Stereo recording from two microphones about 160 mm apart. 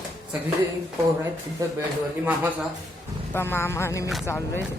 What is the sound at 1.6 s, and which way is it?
Speech, 20° right (ahead or behind).